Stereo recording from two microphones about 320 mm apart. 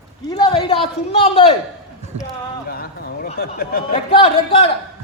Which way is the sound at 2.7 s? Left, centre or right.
Left.